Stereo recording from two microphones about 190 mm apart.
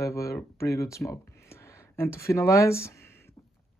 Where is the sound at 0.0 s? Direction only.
15° left (ahead or behind).